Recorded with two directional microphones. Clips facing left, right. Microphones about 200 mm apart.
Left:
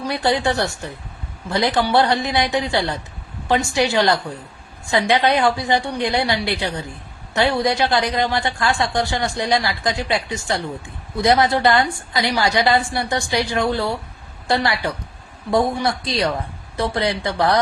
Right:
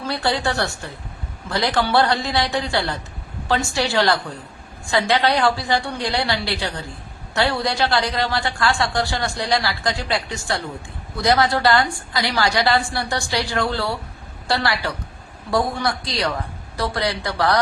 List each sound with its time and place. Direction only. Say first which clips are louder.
0.1 s a woman's voice: left 3 dB; 20° left (ahead or behind)